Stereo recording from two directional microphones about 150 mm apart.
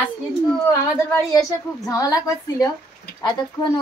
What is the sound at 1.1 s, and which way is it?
A woman's voice, 20° left (ahead or behind).